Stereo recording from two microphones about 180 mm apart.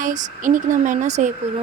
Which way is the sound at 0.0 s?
45° right (ahead or behind).